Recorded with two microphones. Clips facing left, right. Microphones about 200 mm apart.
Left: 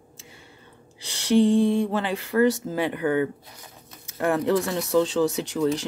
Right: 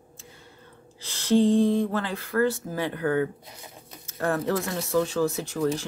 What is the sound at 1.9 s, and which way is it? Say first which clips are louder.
Speech: left 3 dB; 15° left (ahead or behind).